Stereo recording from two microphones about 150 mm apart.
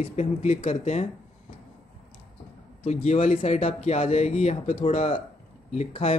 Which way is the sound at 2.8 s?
50° left (ahead or behind).